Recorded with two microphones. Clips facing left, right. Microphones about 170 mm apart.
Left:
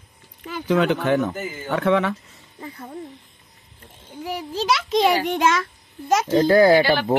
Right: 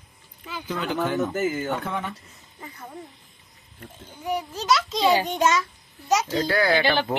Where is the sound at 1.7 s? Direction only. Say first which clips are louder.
Left 10 dB; 85° left.